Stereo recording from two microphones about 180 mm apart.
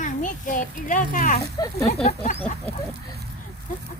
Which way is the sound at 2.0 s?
40° left (ahead or behind).